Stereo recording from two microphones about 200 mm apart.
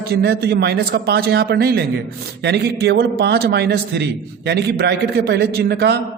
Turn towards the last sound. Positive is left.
turn(degrees=-55)  # may be behind; listen again after turning